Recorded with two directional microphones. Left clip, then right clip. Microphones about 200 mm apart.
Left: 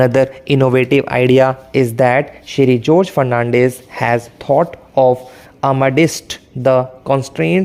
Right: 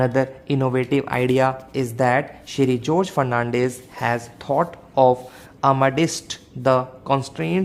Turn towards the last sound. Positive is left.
turn(degrees=35)  # may be behind; listen again after turning